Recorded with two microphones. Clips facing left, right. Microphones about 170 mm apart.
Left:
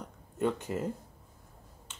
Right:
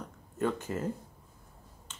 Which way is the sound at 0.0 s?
15° left (ahead or behind).